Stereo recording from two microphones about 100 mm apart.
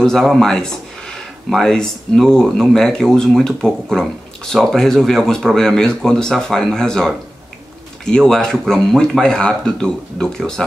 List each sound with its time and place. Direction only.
0.0 s speech: 5° left (ahead or behind)